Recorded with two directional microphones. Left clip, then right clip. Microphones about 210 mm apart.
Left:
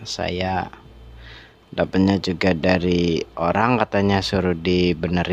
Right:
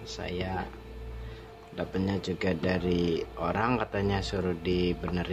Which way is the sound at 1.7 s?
50° left (ahead or behind).